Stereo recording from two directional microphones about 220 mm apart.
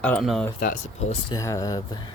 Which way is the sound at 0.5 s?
40° left (ahead or behind).